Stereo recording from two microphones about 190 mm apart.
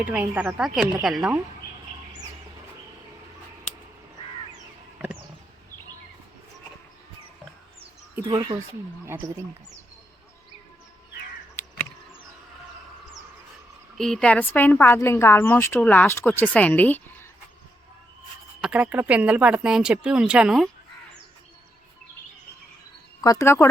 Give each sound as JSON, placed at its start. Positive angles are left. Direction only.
{"t": 0.0, "sound": "a woman's voice", "side_deg": -5}
{"t": 8.3, "sound": "a woman's voice", "side_deg": -20}
{"t": 13.9, "sound": "speech", "side_deg": 0}
{"t": 18.6, "sound": "a woman's voice", "side_deg": -5}
{"t": 23.2, "sound": "speech", "side_deg": 15}